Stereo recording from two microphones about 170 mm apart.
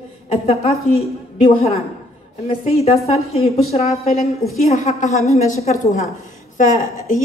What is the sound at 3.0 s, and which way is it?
Speech, 35° left (ahead or behind).